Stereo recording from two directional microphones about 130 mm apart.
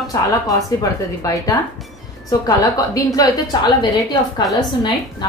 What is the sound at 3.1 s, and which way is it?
Speech, 30° left (ahead or behind).